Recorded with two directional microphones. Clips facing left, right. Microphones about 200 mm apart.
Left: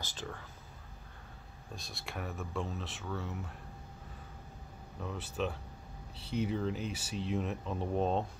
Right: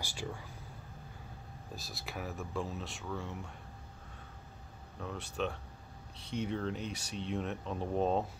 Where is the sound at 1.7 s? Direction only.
Centre (ahead or behind).